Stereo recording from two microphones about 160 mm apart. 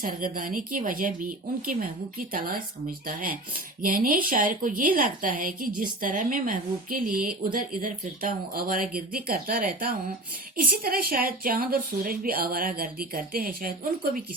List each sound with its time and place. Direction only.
0.0 s a woman's voice: 60° right (ahead or behind)